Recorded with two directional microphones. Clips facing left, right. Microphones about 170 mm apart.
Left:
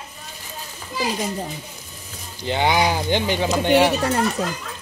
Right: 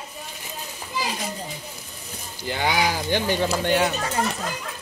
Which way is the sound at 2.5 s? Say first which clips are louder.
Left 5 dB; 25° left (ahead or behind).